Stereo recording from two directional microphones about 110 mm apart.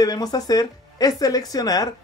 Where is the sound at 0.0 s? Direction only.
35° left (ahead or behind).